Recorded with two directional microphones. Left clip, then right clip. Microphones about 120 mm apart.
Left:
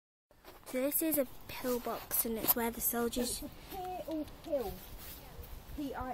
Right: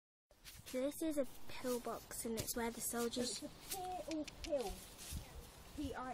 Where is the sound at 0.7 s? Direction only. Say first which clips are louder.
Left 6 dB; 15° left (ahead or behind).